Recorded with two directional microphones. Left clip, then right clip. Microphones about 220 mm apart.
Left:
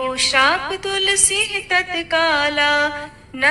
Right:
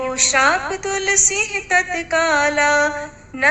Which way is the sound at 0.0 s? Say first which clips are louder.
Even; 30° left (ahead or behind).